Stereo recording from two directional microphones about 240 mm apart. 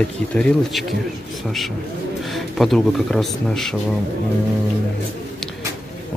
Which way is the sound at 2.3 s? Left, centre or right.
Centre.